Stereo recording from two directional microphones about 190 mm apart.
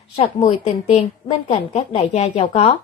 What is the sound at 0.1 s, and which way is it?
A woman's voice, 30° left (ahead or behind).